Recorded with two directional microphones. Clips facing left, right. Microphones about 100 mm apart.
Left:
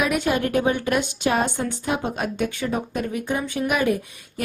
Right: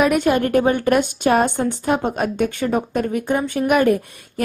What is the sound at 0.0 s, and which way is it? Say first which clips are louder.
Speech: right 5 dB; 50° right (ahead or behind).